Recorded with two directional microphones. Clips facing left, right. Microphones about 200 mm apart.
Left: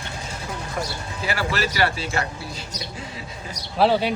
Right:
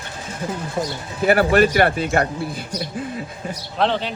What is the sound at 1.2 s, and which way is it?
Speech, 55° right (ahead or behind).